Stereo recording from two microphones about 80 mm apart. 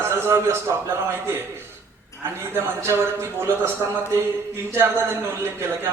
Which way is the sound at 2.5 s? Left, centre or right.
Right.